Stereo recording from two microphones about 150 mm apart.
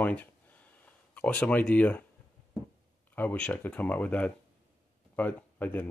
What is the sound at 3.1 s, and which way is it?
Speech, 10° left (ahead or behind).